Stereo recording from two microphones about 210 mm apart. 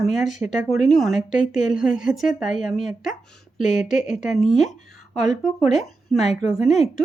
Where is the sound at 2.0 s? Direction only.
Centre (ahead or behind).